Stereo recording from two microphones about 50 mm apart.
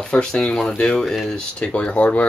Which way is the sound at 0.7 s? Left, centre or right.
Left.